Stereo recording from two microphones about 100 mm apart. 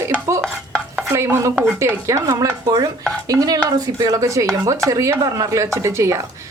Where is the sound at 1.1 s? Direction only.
30° right (ahead or behind).